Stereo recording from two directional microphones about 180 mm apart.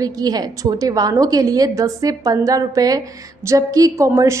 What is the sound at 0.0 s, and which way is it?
A woman's voice, 20° right (ahead or behind).